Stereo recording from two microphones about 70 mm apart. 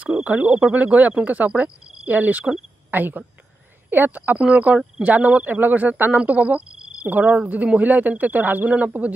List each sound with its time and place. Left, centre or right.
0.0 s speech: centre